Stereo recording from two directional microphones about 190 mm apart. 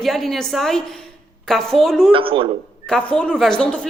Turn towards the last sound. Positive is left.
turn(degrees=5)  # may be behind; listen again after turning